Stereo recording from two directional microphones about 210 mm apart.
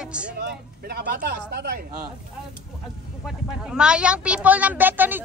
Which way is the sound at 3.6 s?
5° right (ahead or behind).